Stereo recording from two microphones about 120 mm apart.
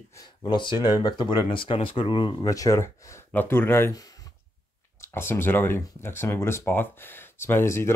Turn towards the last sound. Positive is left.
turn(degrees=20)  # may be behind; listen again after turning